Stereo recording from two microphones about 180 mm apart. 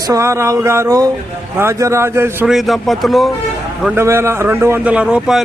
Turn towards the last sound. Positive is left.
turn(degrees=-5)  # may be behind; listen again after turning